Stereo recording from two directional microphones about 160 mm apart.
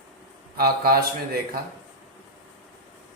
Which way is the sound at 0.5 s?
70° right (ahead or behind).